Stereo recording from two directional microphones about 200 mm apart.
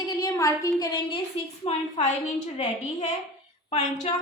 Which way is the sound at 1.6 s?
35° left (ahead or behind).